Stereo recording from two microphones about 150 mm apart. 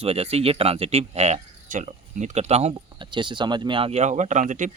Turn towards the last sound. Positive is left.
turn(degrees=-55)  # may be behind; listen again after turning